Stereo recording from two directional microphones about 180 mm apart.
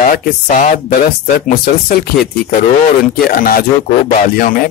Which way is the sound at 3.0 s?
50° left (ahead or behind).